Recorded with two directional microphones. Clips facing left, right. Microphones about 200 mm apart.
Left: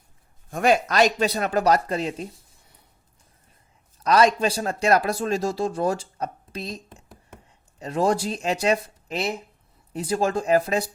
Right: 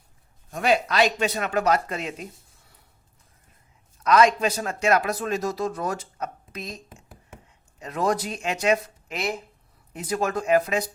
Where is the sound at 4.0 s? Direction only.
35° left (ahead or behind).